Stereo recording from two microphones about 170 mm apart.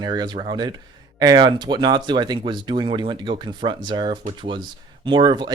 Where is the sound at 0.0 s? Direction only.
25° right (ahead or behind).